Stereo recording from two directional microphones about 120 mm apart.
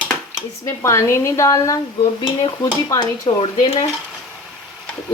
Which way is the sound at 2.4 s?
35° left (ahead or behind).